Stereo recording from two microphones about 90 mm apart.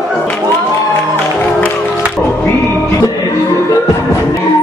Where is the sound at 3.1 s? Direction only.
40° left (ahead or behind).